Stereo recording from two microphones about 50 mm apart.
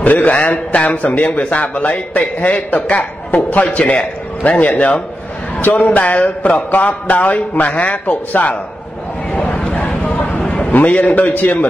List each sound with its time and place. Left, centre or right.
0.0 s a man's voice: left
5.6 s speech: left
9.5 s a sound: left
10.7 s speech: left